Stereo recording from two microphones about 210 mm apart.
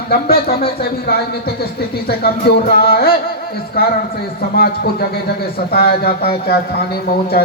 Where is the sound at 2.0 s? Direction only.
45° left (ahead or behind).